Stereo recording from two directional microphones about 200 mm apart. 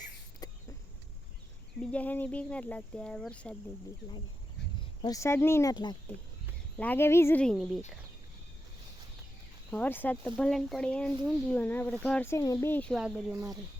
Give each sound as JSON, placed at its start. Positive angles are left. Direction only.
{"t": 0.4, "sound": "a sound", "side_deg": 20}
{"t": 1.8, "sound": "speech", "side_deg": 5}
{"t": 5.0, "sound": "speech", "side_deg": 15}
{"t": 6.7, "sound": "speech", "side_deg": 10}
{"t": 9.7, "sound": "speech", "side_deg": 10}
{"t": 13.0, "sound": "speech", "side_deg": -5}